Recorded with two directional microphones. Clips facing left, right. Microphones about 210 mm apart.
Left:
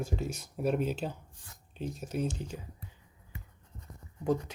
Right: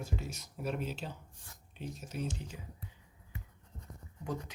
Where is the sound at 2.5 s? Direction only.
40° left (ahead or behind).